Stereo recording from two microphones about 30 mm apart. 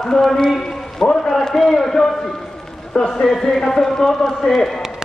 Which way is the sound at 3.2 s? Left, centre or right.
Centre.